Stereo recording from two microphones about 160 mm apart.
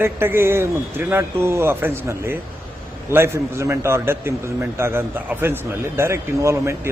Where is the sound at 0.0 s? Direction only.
15° right (ahead or behind).